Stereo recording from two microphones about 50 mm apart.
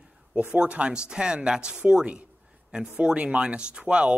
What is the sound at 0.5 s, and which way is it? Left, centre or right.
Speech, right.